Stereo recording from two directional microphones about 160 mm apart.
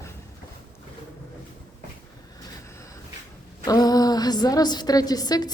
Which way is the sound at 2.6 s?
20° left (ahead or behind).